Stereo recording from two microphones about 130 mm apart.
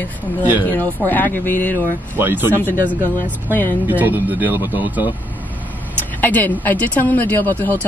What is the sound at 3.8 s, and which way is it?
Speech, 15° right (ahead or behind).